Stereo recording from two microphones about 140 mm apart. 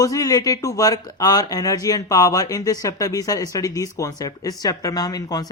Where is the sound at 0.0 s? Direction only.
25° left (ahead or behind).